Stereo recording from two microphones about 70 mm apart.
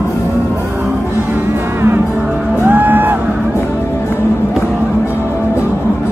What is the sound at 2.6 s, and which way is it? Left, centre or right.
Music, right.